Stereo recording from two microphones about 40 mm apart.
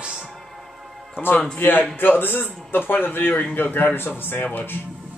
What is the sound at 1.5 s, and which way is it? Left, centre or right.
A man's voice, left.